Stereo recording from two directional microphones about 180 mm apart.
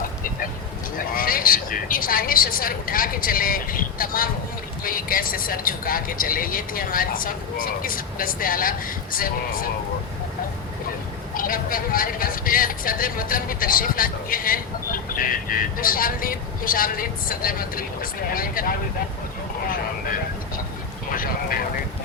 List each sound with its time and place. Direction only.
0.9 s speech: 50° left (ahead or behind)
11.3 s speech: 50° left (ahead or behind)
21.1 s speech: 50° left (ahead or behind)